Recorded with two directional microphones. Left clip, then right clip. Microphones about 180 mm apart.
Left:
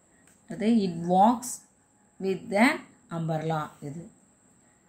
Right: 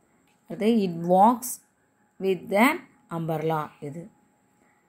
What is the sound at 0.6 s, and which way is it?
A woman's voice, 30° right (ahead or behind).